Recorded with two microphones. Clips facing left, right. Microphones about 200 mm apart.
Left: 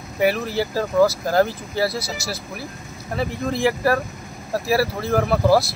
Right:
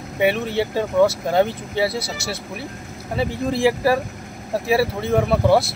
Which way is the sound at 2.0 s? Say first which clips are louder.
Right 1 dB; 25° right (ahead or behind).